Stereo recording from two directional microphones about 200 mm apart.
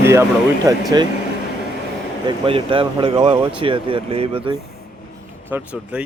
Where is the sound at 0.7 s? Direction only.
15° right (ahead or behind).